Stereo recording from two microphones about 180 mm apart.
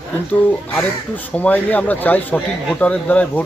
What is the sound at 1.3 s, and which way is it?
Speech, 10° left (ahead or behind).